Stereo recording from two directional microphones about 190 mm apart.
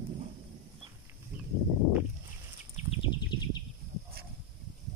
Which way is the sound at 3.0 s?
20° left (ahead or behind).